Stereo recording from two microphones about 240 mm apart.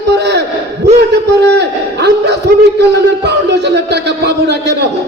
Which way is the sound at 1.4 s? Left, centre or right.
Right.